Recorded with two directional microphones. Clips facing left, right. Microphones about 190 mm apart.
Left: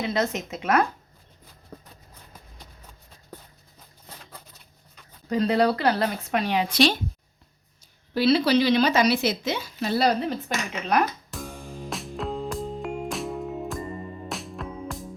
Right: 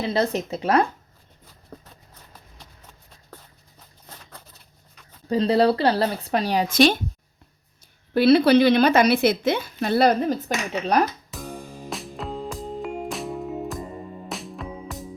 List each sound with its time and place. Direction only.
0.0 s speech: 35° right (ahead or behind)
5.3 s speech: 30° right (ahead or behind); by 7.0 s 50° right (ahead or behind)
8.1 s a woman's voice: 55° right (ahead or behind)
10.7 s speech: 35° right (ahead or behind)
11.9 s music: centre (ahead or behind)